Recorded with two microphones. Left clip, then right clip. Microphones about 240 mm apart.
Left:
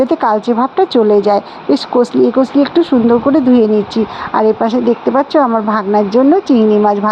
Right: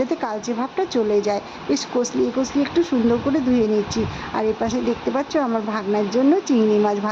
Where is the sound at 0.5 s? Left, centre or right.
Centre.